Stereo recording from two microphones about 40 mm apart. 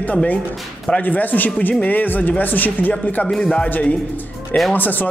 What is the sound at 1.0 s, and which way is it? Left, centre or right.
Speech, left.